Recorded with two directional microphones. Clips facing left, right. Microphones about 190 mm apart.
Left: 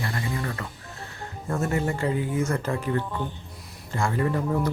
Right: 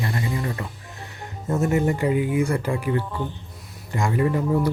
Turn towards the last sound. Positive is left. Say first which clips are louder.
# right 4 dB
turn(degrees=-10)  # may be behind; listen again after turning